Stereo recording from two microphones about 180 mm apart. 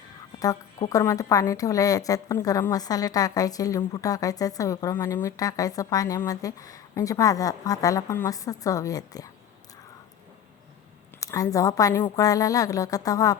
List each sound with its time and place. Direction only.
0.3 s a woman's voice: 20° left (ahead or behind)
11.2 s a woman's voice: 15° left (ahead or behind)